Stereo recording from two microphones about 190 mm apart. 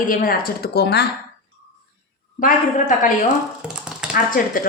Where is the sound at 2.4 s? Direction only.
45° left (ahead or behind).